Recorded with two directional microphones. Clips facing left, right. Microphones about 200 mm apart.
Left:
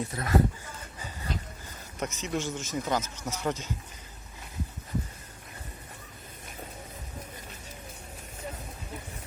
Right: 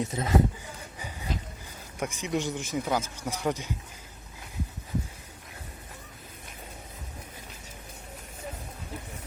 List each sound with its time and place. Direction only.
0.0 s speech: 20° right (ahead or behind)
0.9 s a sound: 15° right (ahead or behind)
2.0 s speech: 15° right (ahead or behind)